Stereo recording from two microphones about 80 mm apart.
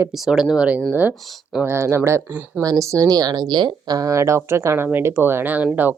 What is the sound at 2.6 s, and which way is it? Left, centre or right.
Speech, right.